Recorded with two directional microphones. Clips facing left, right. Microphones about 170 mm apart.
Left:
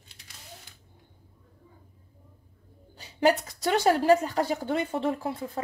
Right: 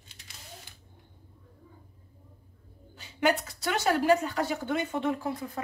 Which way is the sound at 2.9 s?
35° left (ahead or behind).